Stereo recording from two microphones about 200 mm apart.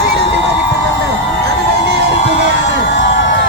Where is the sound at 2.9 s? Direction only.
65° left (ahead or behind).